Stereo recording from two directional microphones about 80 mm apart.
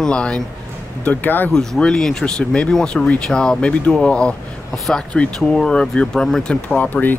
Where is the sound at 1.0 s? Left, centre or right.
Left.